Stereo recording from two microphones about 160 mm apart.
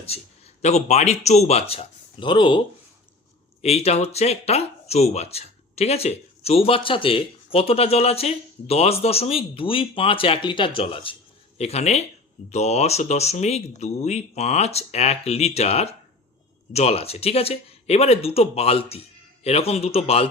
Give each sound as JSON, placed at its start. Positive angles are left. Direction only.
{"t": 0.1, "sound": "a man's voice", "side_deg": 40}
{"t": 3.6, "sound": "speech", "side_deg": 40}